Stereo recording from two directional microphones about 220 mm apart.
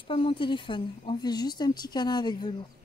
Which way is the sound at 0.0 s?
25° left (ahead or behind).